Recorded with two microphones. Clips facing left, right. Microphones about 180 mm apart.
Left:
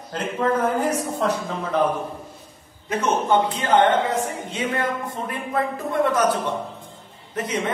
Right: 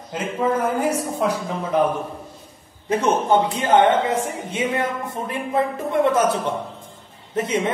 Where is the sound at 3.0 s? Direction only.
15° right (ahead or behind).